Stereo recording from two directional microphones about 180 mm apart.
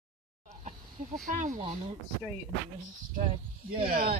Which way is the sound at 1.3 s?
45° right (ahead or behind).